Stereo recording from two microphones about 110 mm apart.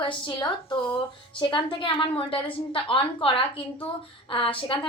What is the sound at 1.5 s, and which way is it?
A woman's voice, 50° left (ahead or behind).